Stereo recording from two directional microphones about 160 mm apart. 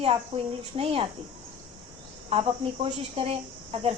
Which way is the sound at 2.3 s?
35° right (ahead or behind).